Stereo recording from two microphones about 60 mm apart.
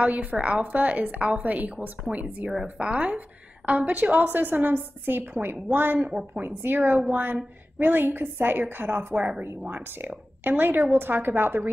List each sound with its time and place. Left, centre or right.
0.0 s a woman's voice: right
9.1 s speech: centre
9.6 s a woman's voice: right